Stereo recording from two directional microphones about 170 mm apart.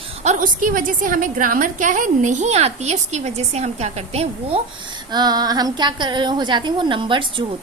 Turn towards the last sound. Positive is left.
turn(degrees=-30)  # may be behind; listen again after turning